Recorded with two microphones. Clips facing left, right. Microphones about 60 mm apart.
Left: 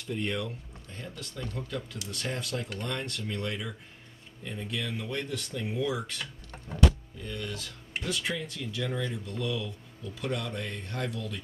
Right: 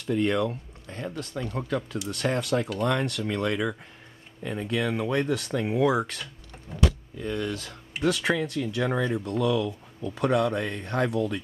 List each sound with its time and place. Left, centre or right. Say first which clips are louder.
0.0 s speech: right 8 dB; right
0.8 s a sound: right 8 dB; right
1.1 s speech: right 5 dB; right
2.0 s speech: right 11 dB; right
2.8 s speech: right 9 dB; right
4.4 s speech: right 8 dB; right
7.2 s speech: right 8 dB; right
10.6 s speech: right 8 dB; right